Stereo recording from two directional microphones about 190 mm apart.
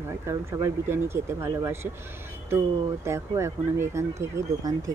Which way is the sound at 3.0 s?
15° right (ahead or behind).